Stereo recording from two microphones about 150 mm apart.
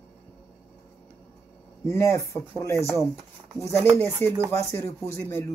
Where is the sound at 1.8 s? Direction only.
20° left (ahead or behind).